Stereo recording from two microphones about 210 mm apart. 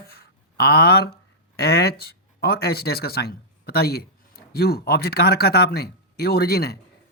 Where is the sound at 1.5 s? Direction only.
50° left (ahead or behind).